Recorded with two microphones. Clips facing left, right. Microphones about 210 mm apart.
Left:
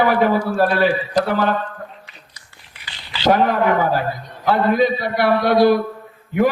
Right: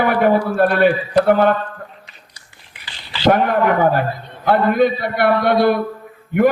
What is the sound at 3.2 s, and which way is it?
A man's voice, 55° right (ahead or behind).